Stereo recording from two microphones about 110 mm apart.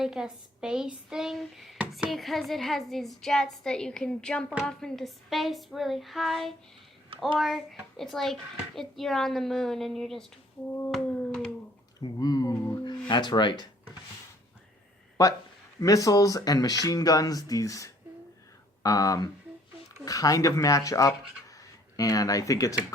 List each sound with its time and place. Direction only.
0.0 s a child's voice: 5° right (ahead or behind)
10.7 s a sound: 15° left (ahead or behind)
10.9 s cat: 5° left (ahead or behind)
11.9 s speech: 35° left (ahead or behind)
15.8 s speech: 30° left (ahead or behind)